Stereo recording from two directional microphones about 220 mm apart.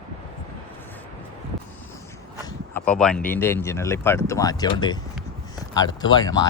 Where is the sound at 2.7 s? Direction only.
5° left (ahead or behind).